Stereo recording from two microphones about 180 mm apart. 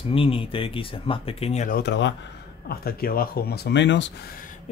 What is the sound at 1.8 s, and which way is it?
Speech, 80° left.